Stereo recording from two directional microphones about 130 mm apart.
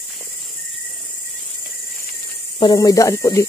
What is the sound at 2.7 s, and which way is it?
Speech, 25° left (ahead or behind).